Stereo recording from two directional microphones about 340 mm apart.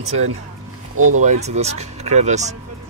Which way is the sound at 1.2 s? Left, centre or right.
Centre.